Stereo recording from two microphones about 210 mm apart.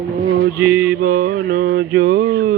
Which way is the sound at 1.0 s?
40° right (ahead or behind).